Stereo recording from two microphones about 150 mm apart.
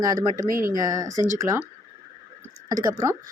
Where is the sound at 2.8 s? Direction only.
20° right (ahead or behind).